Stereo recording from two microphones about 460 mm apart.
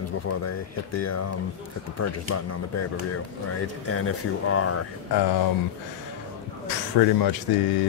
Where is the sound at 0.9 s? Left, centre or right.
Left.